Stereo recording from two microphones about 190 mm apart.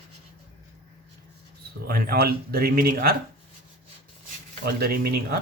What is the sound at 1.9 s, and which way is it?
Speech, 55° right (ahead or behind).